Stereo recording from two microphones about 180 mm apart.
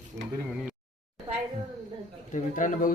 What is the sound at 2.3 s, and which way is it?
Speech, 45° left (ahead or behind).